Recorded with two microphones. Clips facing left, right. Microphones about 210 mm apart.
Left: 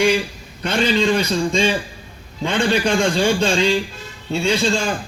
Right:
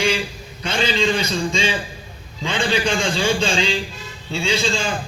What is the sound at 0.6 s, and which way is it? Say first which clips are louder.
A man's voice: left 3 dB; 60° left (ahead or behind).